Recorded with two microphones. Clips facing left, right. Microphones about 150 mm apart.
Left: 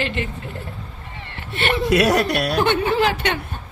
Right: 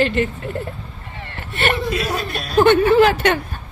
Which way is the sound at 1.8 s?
80° left.